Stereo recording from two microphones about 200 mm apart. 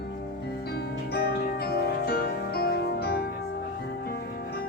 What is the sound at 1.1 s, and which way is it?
Music, 50° left (ahead or behind).